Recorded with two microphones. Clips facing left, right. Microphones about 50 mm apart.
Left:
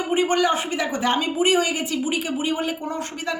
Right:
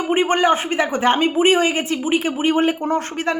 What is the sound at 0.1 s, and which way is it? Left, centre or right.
Speech, right.